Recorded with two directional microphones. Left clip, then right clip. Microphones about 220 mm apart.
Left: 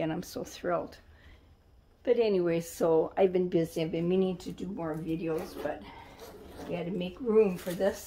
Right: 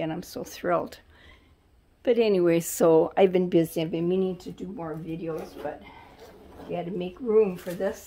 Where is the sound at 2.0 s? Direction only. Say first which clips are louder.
Right 5 dB; 55° right (ahead or behind); by 5.8 s 25° right (ahead or behind).